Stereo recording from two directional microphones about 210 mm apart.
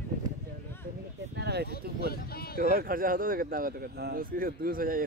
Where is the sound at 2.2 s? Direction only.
45° left (ahead or behind).